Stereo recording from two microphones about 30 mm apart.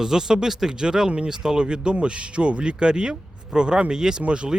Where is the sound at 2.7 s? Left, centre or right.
Right.